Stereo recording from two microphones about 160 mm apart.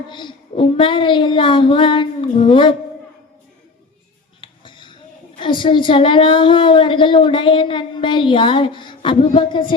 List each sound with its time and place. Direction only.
0.1 s a woman's voice: 30° left (ahead or behind)
4.4 s music: 30° left (ahead or behind)
5.4 s a woman's voice: 30° left (ahead or behind)